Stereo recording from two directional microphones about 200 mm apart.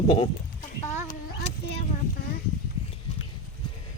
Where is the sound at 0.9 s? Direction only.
35° left (ahead or behind).